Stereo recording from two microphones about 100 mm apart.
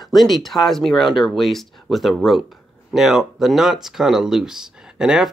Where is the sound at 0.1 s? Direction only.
Centre (ahead or behind).